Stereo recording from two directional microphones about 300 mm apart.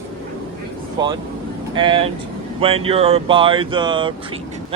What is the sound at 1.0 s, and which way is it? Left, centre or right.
Speech, centre.